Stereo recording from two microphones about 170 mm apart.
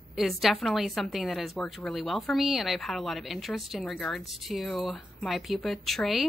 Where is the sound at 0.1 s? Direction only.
Centre (ahead or behind).